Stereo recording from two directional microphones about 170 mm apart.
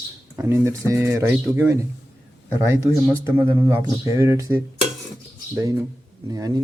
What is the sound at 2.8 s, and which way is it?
Speech, 15° right (ahead or behind).